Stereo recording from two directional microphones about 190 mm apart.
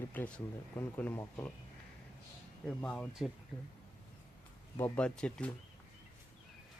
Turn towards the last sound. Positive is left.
turn(degrees=5)  # may be behind; listen again after turning